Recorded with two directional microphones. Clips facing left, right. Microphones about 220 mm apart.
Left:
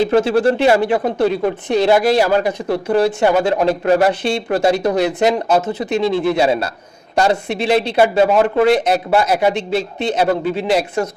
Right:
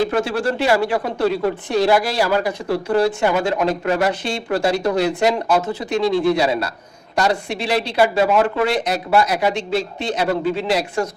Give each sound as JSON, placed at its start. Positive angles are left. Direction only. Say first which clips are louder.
{"t": 0.0, "sound": "speech", "louder": "left 6 dB", "side_deg": 25}
{"t": 3.3, "sound": "speech", "louder": "left 4 dB", "side_deg": 35}
{"t": 4.5, "sound": "speech", "louder": "left 2 dB", "side_deg": 20}
{"t": 8.3, "sound": "speech", "louder": "left 3 dB", "side_deg": 35}
{"t": 8.6, "sound": "speech", "louder": "left 6 dB", "side_deg": 55}
{"t": 9.0, "sound": "speech", "louder": "right 1 dB", "side_deg": 25}